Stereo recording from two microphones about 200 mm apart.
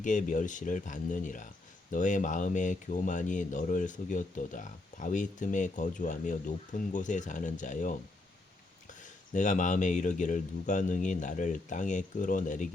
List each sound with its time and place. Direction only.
0.0 s speech: 40° left (ahead or behind)